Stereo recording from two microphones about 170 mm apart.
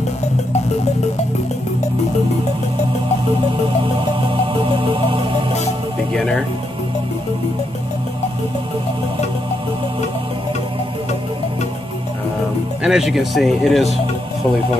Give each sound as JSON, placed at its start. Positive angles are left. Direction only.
{"t": 4.6, "sound": "music", "side_deg": -30}
{"t": 6.1, "sound": "speech", "side_deg": 5}
{"t": 12.8, "sound": "speech", "side_deg": 0}